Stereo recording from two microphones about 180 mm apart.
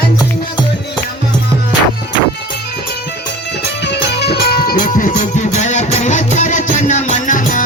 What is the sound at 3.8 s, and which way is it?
Music, 70° left (ahead or behind).